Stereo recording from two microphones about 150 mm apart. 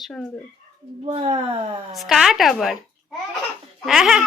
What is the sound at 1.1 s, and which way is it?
Speech, 40° right (ahead or behind).